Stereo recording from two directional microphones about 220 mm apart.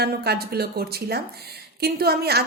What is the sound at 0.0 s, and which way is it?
A woman's voice, 45° right (ahead or behind).